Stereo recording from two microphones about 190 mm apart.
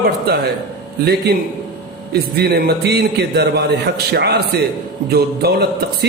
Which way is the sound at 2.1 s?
55° right (ahead or behind).